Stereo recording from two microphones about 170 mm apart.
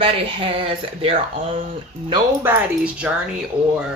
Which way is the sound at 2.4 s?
10° right (ahead or behind).